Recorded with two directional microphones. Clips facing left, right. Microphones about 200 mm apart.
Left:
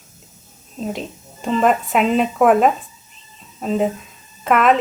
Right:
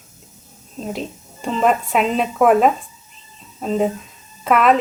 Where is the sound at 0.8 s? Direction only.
Centre (ahead or behind).